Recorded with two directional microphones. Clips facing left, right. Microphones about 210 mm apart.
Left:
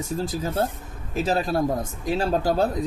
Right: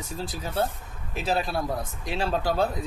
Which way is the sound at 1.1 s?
45° left (ahead or behind).